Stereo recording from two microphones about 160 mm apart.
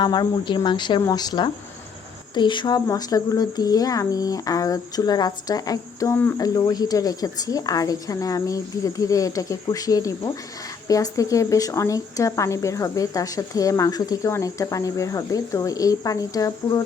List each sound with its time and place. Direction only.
0.0 s a woman's voice: 25° left (ahead or behind)